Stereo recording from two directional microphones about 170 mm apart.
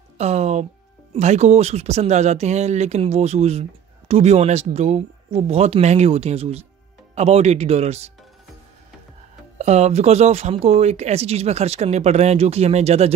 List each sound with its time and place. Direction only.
0.2 s a sound: 40° right (ahead or behind)
1.1 s speech: 40° right (ahead or behind)
9.6 s speech: 40° right (ahead or behind)